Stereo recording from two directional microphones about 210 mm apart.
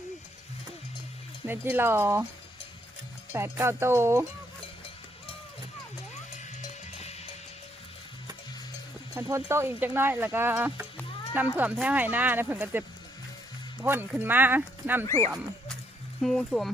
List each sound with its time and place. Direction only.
1.5 s speech: 10° right (ahead or behind)
3.3 s speech: 10° right (ahead or behind)
6.6 s music: 30° left (ahead or behind)
9.1 s speech: 15° right (ahead or behind)
13.8 s speech: 10° right (ahead or behind)
15.0 s speech: 15° left (ahead or behind)
16.2 s speech: centre (ahead or behind)